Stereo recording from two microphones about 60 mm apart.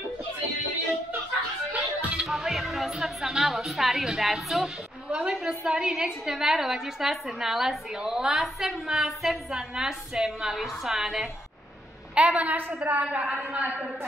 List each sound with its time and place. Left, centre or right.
1.7 s music: right
2.2 s music: centre
5.1 s a woman's voice: centre
12.2 s a woman's voice: right
13.2 s a woman's voice: centre